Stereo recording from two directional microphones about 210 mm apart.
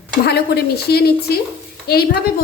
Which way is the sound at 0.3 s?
50° left (ahead or behind).